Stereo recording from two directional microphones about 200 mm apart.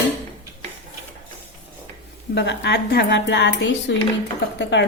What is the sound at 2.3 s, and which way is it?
A woman's voice, 60° left (ahead or behind).